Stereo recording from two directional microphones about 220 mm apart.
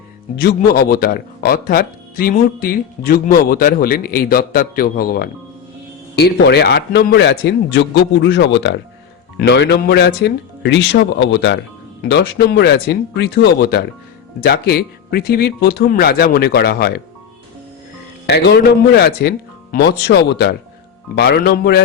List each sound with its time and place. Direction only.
0.3 s a man's voice: 45° left (ahead or behind)
18.3 s a man's voice: 45° left (ahead or behind)